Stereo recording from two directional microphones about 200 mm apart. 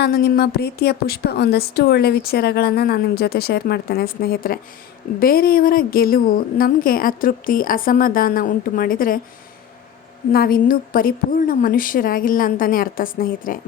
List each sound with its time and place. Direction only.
0.0 s a woman's voice: 55° left (ahead or behind)
10.3 s a woman's voice: 45° left (ahead or behind)